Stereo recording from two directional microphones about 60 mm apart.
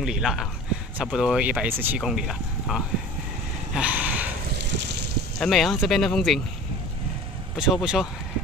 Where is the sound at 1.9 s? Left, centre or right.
Centre.